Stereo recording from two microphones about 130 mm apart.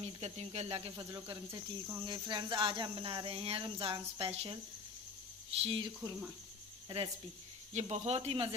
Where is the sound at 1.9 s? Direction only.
30° right (ahead or behind); by 4.5 s 50° right (ahead or behind).